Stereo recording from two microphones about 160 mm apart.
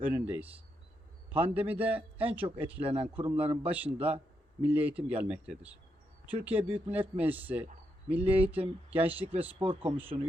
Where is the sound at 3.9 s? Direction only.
40° right (ahead or behind).